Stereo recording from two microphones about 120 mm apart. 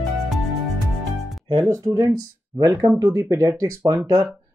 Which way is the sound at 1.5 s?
30° right (ahead or behind).